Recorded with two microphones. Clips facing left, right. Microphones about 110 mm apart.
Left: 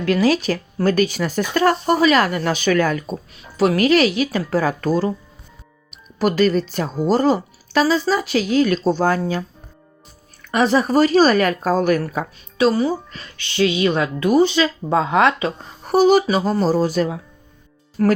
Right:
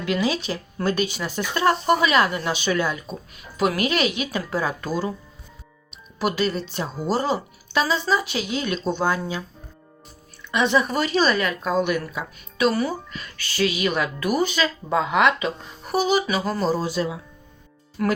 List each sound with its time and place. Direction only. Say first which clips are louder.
0.0 s speech: left 7 dB; 45° left (ahead or behind)
3.3 s speech: left 5 dB; 35° left (ahead or behind)
6.1 s speech: left 7 dB; 45° left (ahead or behind)
10.5 s speech: left 5 dB; 40° left (ahead or behind)